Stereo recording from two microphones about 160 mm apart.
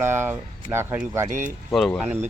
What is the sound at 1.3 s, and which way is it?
Speech, 50° right (ahead or behind).